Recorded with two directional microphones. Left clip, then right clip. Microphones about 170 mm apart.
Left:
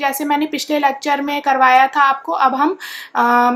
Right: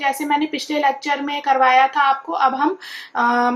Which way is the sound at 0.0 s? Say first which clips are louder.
Left 2 dB; 25° left (ahead or behind).